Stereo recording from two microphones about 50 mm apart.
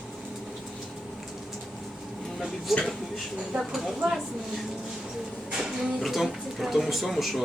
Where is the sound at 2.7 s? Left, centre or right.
Centre.